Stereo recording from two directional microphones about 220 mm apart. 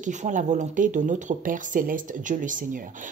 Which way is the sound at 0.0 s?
35° right (ahead or behind).